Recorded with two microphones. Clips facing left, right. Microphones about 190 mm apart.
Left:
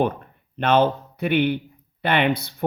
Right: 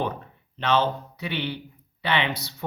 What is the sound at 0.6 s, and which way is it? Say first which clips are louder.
Speech: left 5 dB; 55° left (ahead or behind).